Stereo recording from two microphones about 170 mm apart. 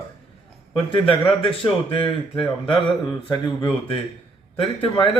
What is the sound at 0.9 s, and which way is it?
A man's voice, 30° left (ahead or behind).